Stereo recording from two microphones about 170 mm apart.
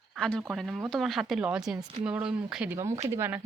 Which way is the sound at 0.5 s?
Centre (ahead or behind).